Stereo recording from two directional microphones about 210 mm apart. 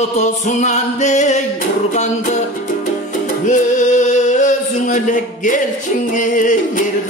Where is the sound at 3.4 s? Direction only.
35° left (ahead or behind).